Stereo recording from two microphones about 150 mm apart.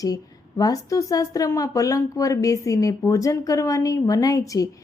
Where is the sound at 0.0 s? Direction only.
25° left (ahead or behind).